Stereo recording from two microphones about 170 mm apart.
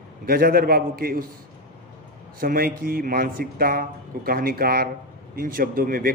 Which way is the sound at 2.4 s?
60° right (ahead or behind).